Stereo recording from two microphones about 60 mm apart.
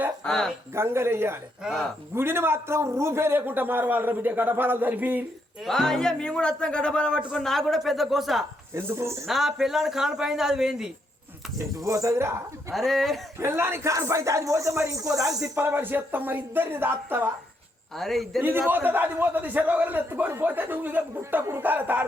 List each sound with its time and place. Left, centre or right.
0.3 s speech: centre
0.7 s a man's voice: right
5.6 s a man's voice: centre
7.3 s speech: centre
8.7 s speech: right
9.2 s speech: centre
11.8 s speech: right
12.7 s speech: centre
13.4 s speech: right
13.8 s speech: right
15.5 s a man's voice: right
17.9 s speech: centre
18.7 s a man's voice: right